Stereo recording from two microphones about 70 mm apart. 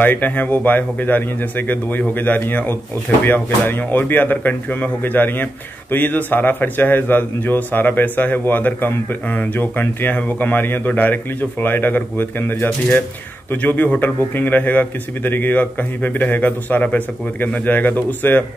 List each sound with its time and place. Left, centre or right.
0.0 s speech: left